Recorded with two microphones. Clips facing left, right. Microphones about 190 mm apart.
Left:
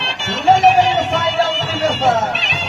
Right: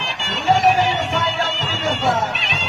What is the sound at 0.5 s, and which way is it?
Music, 90° left.